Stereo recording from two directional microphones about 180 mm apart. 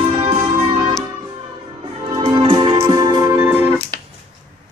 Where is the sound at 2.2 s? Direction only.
25° right (ahead or behind).